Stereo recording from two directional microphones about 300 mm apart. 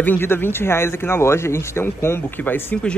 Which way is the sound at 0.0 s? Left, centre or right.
Centre.